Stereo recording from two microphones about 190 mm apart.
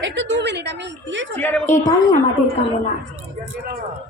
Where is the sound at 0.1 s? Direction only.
70° right (ahead or behind).